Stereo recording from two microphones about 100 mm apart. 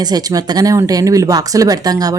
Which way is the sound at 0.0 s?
40° right (ahead or behind).